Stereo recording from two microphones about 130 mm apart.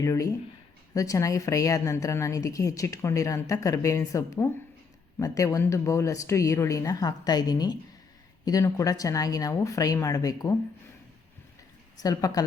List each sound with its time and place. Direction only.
0.0 s a woman's voice: 25° left (ahead or behind)
11.9 s a woman's voice: 30° left (ahead or behind)